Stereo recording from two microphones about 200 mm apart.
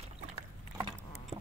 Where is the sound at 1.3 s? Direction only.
30° right (ahead or behind).